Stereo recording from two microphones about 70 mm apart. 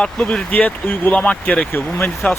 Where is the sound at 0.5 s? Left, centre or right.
Left.